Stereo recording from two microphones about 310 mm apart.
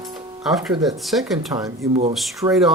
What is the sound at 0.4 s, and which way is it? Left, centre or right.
Speech, centre.